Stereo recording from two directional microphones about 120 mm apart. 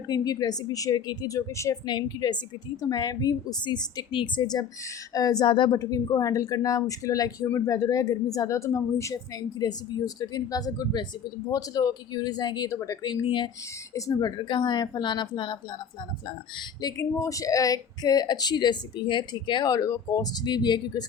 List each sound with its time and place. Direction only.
0.1 s speech: 35° left (ahead or behind)
5.8 s speech: 25° left (ahead or behind)
17.0 s speech: 25° left (ahead or behind)